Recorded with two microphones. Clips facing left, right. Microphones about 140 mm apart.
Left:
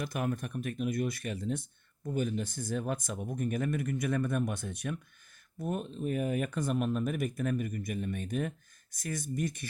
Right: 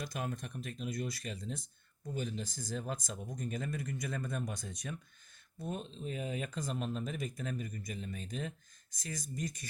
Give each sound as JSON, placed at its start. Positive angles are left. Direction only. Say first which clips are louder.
{"t": 0.0, "sound": "speech", "louder": "left 6 dB", "side_deg": 60}